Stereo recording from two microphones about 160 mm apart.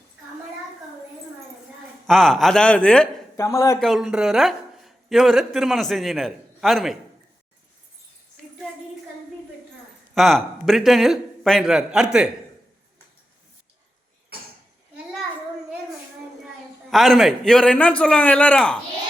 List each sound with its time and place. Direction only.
2.0 s a man's voice: centre (ahead or behind)
3.3 s speech: 20° left (ahead or behind)
3.8 s speech: centre (ahead or behind)
10.2 s a man's voice: centre (ahead or behind)
16.9 s a man's voice: centre (ahead or behind)